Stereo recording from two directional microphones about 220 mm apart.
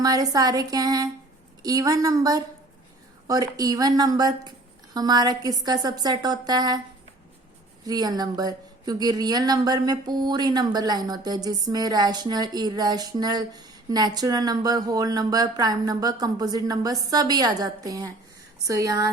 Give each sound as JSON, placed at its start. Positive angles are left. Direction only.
{"t": 0.0, "sound": "speech", "side_deg": -15}
{"t": 7.9, "sound": "speech", "side_deg": -15}